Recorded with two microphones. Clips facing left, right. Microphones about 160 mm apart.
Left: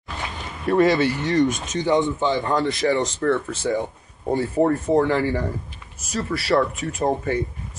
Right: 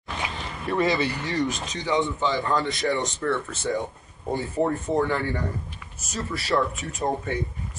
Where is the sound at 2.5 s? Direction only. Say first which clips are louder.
Left 4 dB; centre (ahead or behind).